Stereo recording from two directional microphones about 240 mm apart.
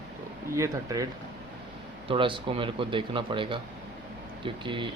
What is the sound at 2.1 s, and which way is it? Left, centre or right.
Speech, right.